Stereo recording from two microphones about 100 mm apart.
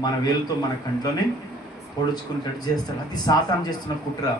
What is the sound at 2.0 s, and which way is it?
Speech, 40° left (ahead or behind).